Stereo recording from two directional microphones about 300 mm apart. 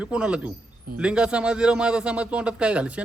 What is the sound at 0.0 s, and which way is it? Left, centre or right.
A man's voice, centre.